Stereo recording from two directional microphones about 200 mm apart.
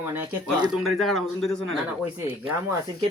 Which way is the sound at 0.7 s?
Centre (ahead or behind).